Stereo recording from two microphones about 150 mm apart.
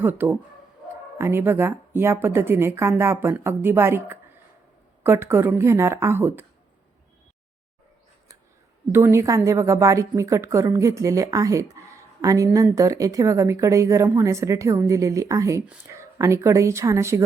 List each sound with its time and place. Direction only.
0.0 s a woman's voice: 10° right (ahead or behind)
8.9 s a woman's voice: 15° right (ahead or behind)